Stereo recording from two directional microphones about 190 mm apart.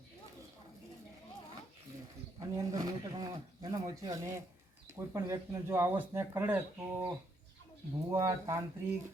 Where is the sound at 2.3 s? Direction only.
20° right (ahead or behind).